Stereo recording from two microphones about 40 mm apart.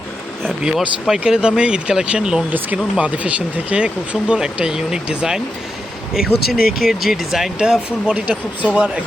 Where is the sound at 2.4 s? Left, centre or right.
Right.